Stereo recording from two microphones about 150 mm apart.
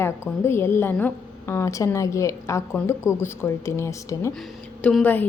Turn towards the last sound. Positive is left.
turn(degrees=10)  # may be behind; listen again after turning